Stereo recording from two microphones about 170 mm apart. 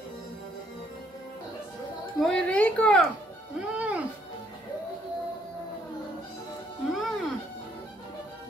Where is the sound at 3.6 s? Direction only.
10° right (ahead or behind).